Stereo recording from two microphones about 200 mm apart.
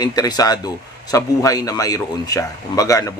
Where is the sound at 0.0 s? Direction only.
20° left (ahead or behind).